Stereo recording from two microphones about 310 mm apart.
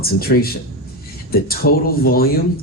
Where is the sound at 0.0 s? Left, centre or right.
Left.